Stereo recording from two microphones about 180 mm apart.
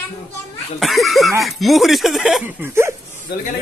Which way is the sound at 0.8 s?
Centre (ahead or behind).